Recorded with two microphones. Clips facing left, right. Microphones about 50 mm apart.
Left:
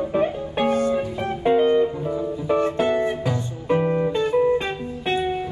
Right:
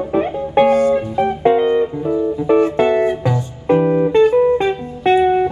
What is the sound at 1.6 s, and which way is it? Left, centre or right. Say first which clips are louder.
Music: right 2 dB; centre.